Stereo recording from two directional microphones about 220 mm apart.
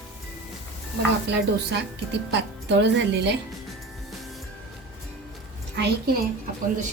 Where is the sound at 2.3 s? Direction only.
50° right (ahead or behind).